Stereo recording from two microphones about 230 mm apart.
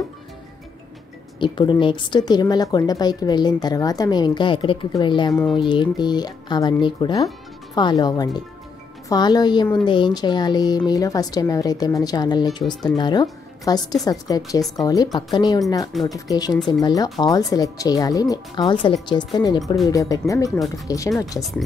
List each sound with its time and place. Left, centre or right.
1.4 s speech: centre
5.3 s speech: centre
5.6 s speech: centre
15.9 s speech: centre
16.3 s speech: centre
19.6 s speech: centre
19.9 s speech: centre
21.4 s speech: centre